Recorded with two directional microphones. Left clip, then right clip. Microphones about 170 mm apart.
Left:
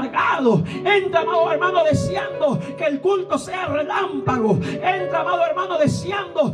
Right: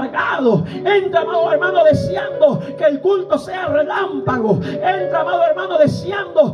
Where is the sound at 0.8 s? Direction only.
15° left (ahead or behind).